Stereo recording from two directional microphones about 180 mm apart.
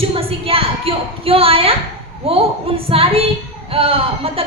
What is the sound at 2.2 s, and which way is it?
A woman's voice, 30° right (ahead or behind).